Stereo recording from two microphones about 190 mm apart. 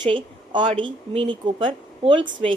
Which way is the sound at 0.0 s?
25° right (ahead or behind).